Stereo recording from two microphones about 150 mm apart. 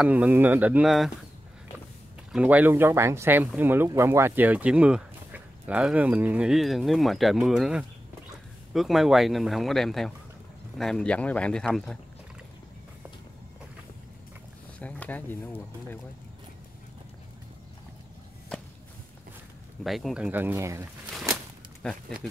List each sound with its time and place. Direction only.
0.0 s speech: 10° right (ahead or behind)
2.3 s speech: 10° right (ahead or behind)
14.8 s speech: 10° left (ahead or behind)
19.8 s speech: centre (ahead or behind)
20.2 s speech: 10° right (ahead or behind)
21.8 s speech: 5° left (ahead or behind)